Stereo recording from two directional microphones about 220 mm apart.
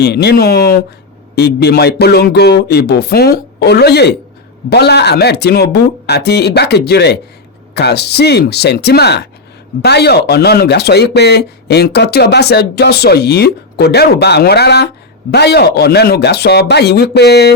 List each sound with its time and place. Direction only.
0.0 s speech: 50° left (ahead or behind)